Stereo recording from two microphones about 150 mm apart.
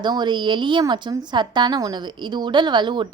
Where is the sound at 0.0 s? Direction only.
30° right (ahead or behind).